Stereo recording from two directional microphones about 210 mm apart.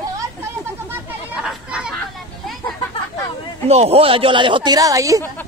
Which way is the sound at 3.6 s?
30° right (ahead or behind).